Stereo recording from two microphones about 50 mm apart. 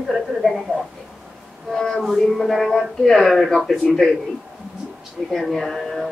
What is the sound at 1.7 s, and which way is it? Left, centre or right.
Music, centre.